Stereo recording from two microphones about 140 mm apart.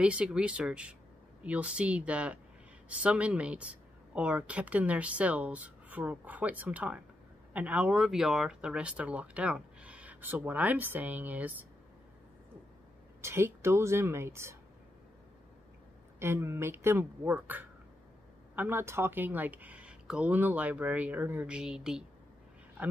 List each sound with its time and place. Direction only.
0.0 s speech: 10° right (ahead or behind)
13.2 s speech: 20° right (ahead or behind)
16.2 s speech: 20° right (ahead or behind)
22.8 s dog: 10° right (ahead or behind)